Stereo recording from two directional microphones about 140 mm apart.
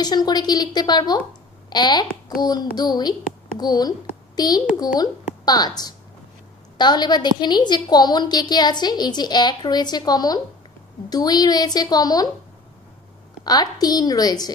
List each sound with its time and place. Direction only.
0.0 s a woman's voice: 30° left (ahead or behind)
13.4 s a woman's voice: 30° left (ahead or behind)